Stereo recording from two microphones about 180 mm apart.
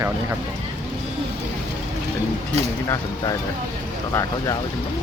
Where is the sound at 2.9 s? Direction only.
20° left (ahead or behind).